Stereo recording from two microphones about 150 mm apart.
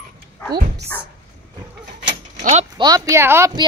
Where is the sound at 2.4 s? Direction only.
45° right (ahead or behind).